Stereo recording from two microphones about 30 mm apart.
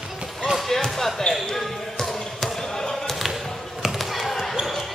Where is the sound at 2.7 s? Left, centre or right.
Centre.